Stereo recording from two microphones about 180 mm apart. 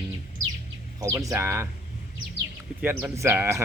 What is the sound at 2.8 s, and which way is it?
Speech, 10° right (ahead or behind).